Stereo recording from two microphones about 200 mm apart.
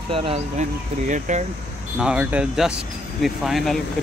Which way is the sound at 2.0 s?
5° right (ahead or behind).